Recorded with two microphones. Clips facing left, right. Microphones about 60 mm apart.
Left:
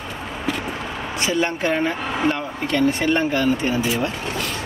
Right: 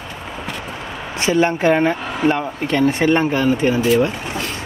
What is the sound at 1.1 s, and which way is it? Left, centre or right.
Speech, right.